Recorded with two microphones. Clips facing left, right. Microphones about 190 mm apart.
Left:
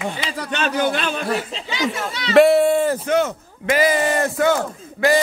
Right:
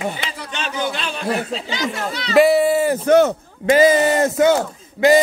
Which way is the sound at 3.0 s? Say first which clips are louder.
Right 6 dB; 40° right (ahead or behind).